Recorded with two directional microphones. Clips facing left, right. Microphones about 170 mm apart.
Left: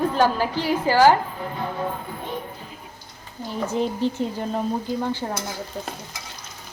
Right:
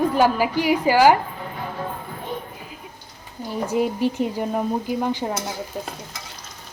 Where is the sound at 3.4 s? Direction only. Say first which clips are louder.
Right 2 dB; 10° right (ahead or behind).